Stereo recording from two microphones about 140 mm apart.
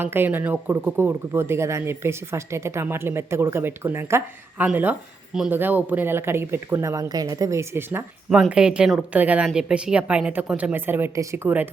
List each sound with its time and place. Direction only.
0.0 s speech: 15° right (ahead or behind)